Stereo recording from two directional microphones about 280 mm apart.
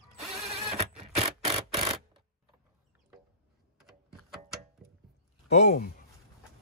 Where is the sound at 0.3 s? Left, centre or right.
Right.